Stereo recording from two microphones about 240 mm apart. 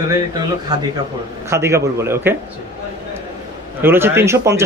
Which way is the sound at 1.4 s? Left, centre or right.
Centre.